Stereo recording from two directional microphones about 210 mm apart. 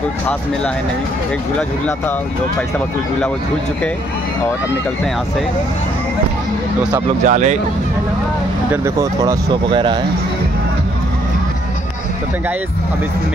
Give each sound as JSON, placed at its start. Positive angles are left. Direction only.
{"t": 7.2, "sound": "speech", "side_deg": -35}
{"t": 8.8, "sound": "speech", "side_deg": -15}